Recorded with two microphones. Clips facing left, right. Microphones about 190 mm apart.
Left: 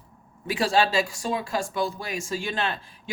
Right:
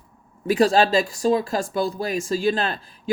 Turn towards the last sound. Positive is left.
turn(degrees=-35)  # may be behind; listen again after turning